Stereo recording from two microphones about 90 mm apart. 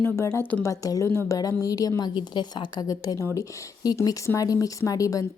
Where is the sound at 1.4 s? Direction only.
40° left (ahead or behind).